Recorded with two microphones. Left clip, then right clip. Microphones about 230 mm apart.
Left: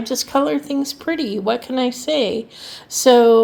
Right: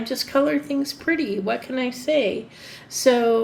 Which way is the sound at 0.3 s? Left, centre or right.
Left.